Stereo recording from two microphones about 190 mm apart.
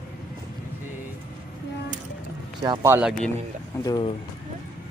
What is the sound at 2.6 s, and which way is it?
Speech, 10° right (ahead or behind).